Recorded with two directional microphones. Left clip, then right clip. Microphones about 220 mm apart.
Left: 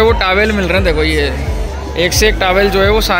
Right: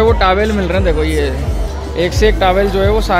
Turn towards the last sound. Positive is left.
turn(degrees=-5)  # may be behind; listen again after turning